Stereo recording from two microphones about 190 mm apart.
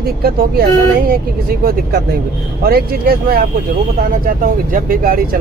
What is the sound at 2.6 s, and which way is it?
Speech, 55° right (ahead or behind).